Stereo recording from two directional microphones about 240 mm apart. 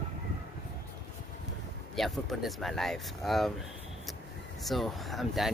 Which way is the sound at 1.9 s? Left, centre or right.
Centre.